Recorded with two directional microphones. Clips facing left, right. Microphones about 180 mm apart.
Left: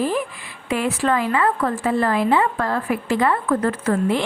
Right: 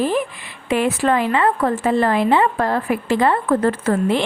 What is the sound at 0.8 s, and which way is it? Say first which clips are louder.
A woman's voice: right 1 dB; 20° right (ahead or behind).